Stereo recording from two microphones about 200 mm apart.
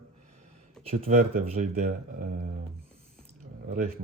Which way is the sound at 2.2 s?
45° right (ahead or behind).